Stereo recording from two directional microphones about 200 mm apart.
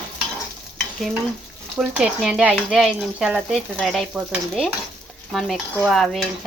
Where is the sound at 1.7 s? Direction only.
5° right (ahead or behind).